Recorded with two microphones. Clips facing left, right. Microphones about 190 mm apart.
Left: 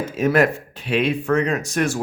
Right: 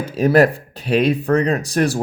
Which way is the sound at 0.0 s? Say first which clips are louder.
Right 4 dB; 35° right (ahead or behind).